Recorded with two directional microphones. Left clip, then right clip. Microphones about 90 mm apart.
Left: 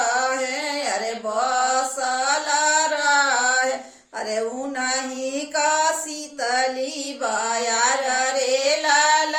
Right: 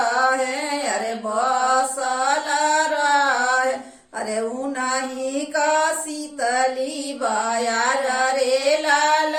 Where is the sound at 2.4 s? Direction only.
30° left (ahead or behind).